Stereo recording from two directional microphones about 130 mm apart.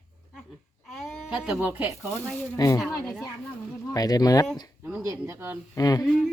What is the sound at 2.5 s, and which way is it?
Speech, 30° left (ahead or behind).